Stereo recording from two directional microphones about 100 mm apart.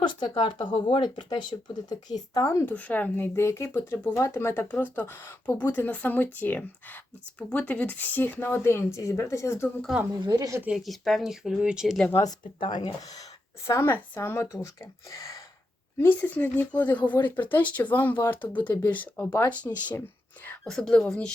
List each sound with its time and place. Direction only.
0.0 s speech: 50° left (ahead or behind); by 2.7 s 30° left (ahead or behind)
2.7 s speech: 15° left (ahead or behind)
10.2 s speech: 35° right (ahead or behind)
10.8 s speech: centre (ahead or behind)
12.5 s speech: 50° left (ahead or behind)
13.7 s speech: 25° left (ahead or behind)
14.4 s speech: 35° left (ahead or behind)
15.1 s gasp: 35° left (ahead or behind)
16.0 s speech: 20° left (ahead or behind)